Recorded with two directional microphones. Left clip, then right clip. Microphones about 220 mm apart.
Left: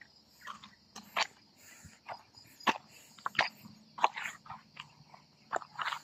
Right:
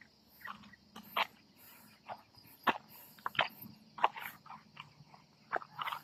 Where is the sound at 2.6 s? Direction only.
50° left (ahead or behind).